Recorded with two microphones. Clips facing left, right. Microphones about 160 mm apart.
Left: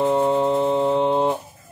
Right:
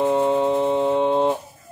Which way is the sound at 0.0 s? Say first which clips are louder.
Even; 5° right (ahead or behind).